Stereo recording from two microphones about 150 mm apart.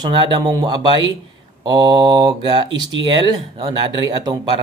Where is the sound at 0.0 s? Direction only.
30° right (ahead or behind).